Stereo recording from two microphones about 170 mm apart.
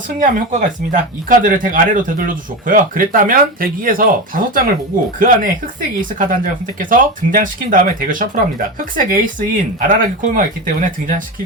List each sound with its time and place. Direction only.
0.2 s speech: 50° right (ahead or behind)